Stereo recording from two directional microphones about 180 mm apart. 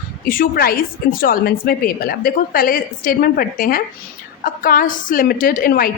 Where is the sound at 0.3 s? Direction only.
55° left (ahead or behind).